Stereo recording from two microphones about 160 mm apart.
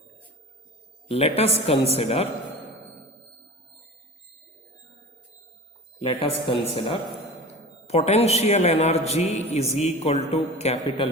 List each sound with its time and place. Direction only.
1.0 s a woman's voice: 40° left (ahead or behind)
6.0 s a woman's voice: 35° left (ahead or behind)